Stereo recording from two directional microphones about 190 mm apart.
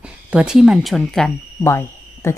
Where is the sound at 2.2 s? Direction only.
15° left (ahead or behind).